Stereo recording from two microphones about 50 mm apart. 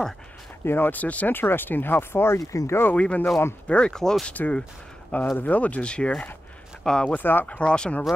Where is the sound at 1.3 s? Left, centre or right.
Left.